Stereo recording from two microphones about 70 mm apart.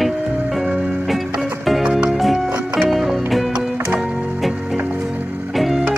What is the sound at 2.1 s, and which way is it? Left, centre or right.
Music, centre.